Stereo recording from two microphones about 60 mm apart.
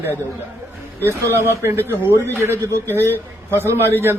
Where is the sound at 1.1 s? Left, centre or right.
Right.